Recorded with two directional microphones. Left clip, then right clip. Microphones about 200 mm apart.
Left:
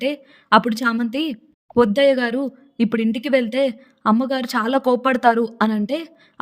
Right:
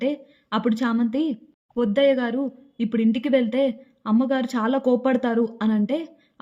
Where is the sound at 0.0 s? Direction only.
40° left (ahead or behind).